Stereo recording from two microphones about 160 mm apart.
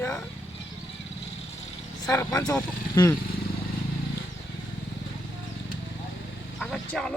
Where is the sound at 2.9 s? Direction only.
20° left (ahead or behind).